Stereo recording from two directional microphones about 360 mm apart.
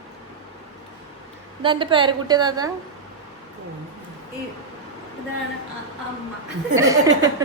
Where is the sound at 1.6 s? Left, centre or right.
Centre.